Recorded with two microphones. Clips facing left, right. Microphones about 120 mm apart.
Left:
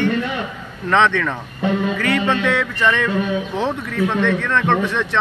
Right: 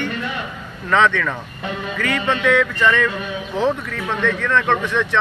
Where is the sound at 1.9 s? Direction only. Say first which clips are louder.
Left 2 dB; 35° left (ahead or behind).